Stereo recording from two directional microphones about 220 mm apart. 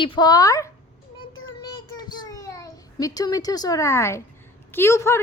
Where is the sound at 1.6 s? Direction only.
20° left (ahead or behind).